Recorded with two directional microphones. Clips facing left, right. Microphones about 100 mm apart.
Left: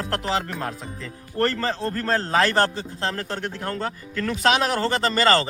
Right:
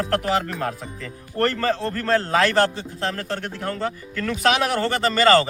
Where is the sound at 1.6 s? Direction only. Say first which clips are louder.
Right 2 dB; 35° left (ahead or behind).